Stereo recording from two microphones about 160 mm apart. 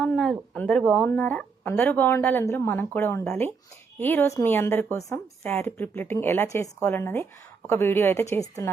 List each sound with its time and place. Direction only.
0.0 s speech: 5° left (ahead or behind)